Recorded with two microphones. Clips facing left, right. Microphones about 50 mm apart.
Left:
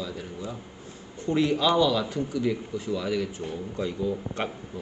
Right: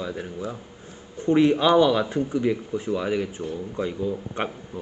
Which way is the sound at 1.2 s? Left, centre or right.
Right.